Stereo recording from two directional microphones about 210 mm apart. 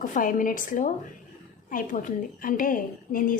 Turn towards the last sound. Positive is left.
turn(degrees=40)  # may be behind; listen again after turning